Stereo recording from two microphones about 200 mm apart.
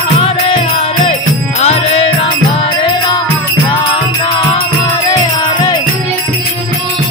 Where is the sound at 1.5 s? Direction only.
30° left (ahead or behind).